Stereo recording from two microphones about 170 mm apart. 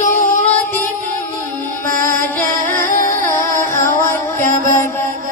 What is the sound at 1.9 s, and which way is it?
Music, 55° right (ahead or behind).